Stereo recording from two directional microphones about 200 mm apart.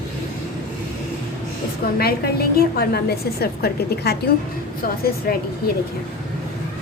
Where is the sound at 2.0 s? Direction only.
50° left (ahead or behind).